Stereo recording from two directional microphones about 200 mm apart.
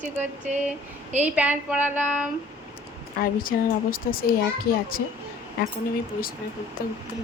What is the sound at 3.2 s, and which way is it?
Speech, 45° left (ahead or behind).